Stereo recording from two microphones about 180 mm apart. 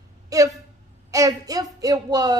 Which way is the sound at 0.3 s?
20° right (ahead or behind).